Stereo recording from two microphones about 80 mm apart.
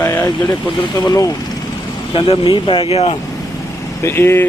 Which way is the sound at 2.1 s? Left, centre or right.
Left.